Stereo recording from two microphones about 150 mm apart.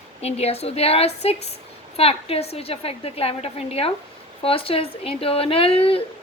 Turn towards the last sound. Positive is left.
turn(degrees=40)  # may be behind; listen again after turning